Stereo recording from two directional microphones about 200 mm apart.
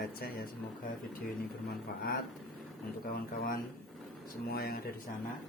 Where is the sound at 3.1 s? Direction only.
45° left (ahead or behind).